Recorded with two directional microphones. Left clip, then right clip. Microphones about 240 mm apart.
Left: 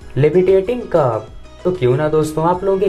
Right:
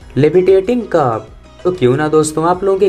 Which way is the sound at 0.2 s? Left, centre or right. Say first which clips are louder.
Right 3 dB; right.